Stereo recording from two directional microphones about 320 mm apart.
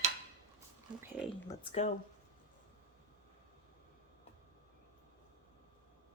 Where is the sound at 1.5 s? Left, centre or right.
Centre.